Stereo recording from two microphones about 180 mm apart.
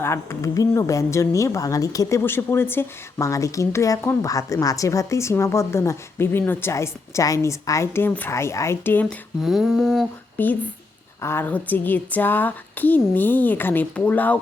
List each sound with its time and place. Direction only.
0.0 s a woman's voice: 15° left (ahead or behind)
9.4 s humming: centre (ahead or behind)
10.3 s a woman's voice: 10° left (ahead or behind)